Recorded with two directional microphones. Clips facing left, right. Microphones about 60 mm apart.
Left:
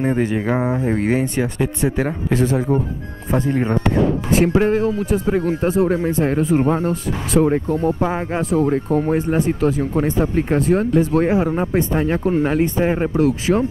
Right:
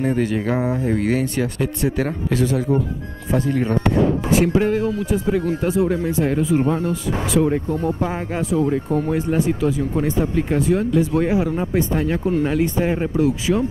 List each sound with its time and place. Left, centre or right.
0.0 s speech: left
2.3 s speech: left
4.3 s speech: left
13.2 s speech: left